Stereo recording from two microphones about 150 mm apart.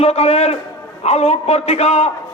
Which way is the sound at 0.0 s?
45° left (ahead or behind).